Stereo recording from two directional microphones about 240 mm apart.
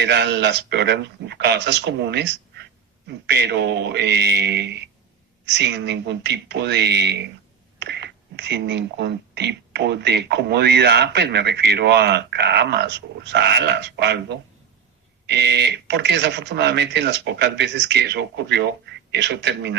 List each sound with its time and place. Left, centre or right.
0.0 s speech: right